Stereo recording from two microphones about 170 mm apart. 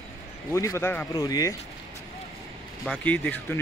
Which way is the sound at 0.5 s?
15° left (ahead or behind).